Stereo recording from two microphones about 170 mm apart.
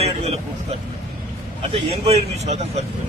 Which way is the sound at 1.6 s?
35° right (ahead or behind).